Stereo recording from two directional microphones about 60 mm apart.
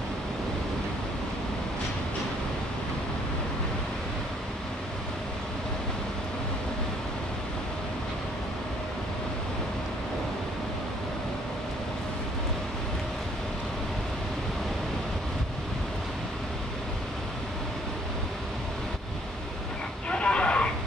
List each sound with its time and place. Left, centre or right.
20.1 s vehicle: centre